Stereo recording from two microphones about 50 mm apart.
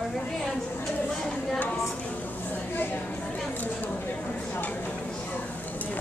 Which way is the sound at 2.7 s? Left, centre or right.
Left.